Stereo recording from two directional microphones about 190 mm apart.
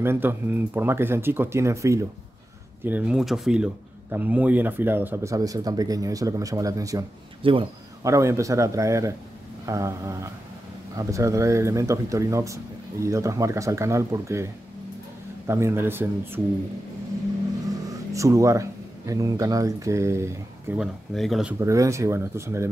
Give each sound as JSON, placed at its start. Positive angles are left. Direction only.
{"t": 0.0, "sound": "speech", "side_deg": -10}
{"t": 17.8, "sound": "speech", "side_deg": -15}
{"t": 20.8, "sound": "speech", "side_deg": 0}
{"t": 21.5, "sound": "speech", "side_deg": -15}